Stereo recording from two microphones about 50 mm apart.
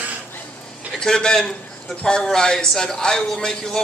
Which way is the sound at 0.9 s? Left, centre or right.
Centre.